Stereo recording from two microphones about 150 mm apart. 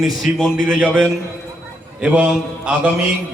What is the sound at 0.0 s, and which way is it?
A man's voice, centre (ahead or behind).